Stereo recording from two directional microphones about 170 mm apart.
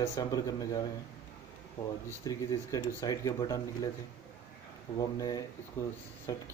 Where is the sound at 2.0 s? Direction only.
20° left (ahead or behind).